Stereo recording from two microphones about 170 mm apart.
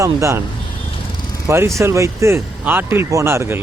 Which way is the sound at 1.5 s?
15° right (ahead or behind).